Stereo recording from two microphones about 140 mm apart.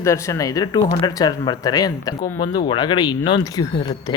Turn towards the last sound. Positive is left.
turn(degrees=30)  # may be behind; listen again after turning